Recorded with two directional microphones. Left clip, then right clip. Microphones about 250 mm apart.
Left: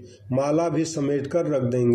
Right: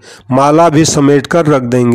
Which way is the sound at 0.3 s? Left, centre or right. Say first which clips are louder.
Right 15 dB; right.